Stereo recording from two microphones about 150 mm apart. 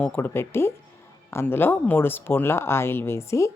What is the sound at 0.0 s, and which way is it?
Speech, 10° left (ahead or behind).